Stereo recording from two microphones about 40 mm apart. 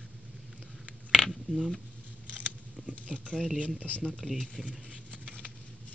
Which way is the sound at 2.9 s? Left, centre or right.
Right.